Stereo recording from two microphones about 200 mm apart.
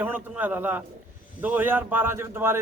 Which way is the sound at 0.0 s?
10° right (ahead or behind).